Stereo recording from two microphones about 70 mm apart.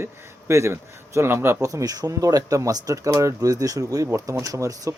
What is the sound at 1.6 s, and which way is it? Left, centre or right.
Speech, right.